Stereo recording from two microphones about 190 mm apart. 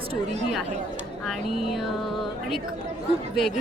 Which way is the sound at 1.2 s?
Centre (ahead or behind).